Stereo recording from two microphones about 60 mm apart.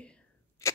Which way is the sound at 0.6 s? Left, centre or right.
Left.